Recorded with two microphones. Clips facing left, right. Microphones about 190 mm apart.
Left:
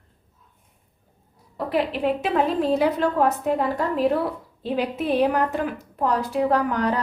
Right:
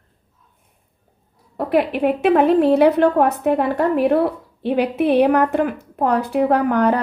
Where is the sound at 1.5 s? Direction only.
60° right (ahead or behind).